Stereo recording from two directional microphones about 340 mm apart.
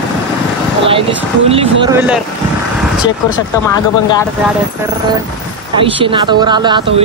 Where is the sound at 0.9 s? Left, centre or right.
Centre.